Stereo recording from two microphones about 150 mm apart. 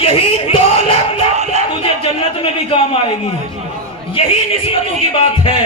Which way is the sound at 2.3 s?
40° left (ahead or behind).